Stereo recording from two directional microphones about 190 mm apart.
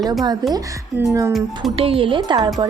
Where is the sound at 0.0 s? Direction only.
20° right (ahead or behind).